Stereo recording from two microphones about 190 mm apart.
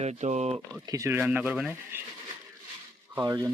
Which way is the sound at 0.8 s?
15° right (ahead or behind).